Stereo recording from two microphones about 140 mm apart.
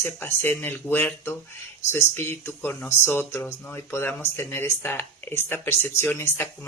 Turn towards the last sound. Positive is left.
turn(degrees=15)  # may be behind; listen again after turning